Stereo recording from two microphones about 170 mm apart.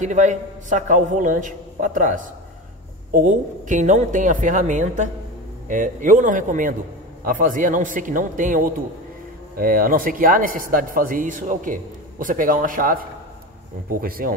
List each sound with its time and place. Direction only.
0.0 s a man's voice: 45° right (ahead or behind)
14.0 s speech: 60° right (ahead or behind)